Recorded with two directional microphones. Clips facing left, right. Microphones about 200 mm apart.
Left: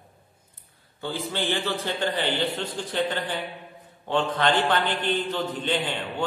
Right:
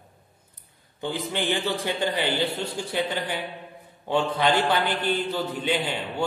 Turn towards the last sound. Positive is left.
turn(degrees=-10)  # may be behind; listen again after turning